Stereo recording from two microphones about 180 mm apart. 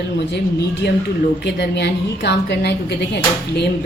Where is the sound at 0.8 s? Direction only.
65° left (ahead or behind).